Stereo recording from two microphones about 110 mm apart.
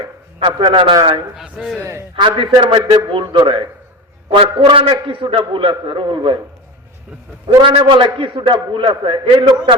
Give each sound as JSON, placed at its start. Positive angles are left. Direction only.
{"t": 0.3, "sound": "a man's voice", "side_deg": -45}
{"t": 1.4, "sound": "a man's voice", "side_deg": -5}
{"t": 1.8, "sound": "a man's voice", "side_deg": -25}
{"t": 2.1, "sound": "a man's voice", "side_deg": -45}
{"t": 7.4, "sound": "a man's voice", "side_deg": -50}